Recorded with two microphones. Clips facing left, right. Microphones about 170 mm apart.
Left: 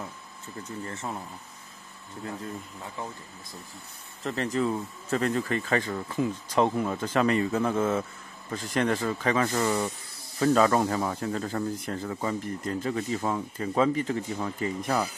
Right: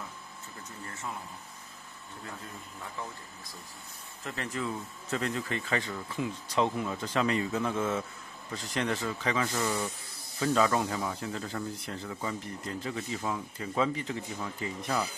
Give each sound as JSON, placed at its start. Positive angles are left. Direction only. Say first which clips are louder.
{"t": 4.2, "sound": "speech", "louder": "left 8 dB", "side_deg": 40}